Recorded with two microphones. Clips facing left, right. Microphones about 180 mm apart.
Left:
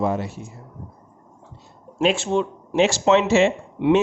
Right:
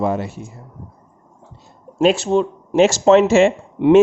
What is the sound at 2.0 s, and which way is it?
Speech, 40° right (ahead or behind).